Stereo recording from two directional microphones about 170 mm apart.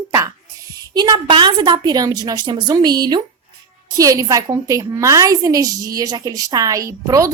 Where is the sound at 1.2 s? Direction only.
30° right (ahead or behind).